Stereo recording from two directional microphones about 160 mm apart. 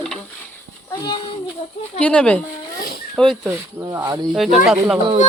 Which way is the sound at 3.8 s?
20° right (ahead or behind).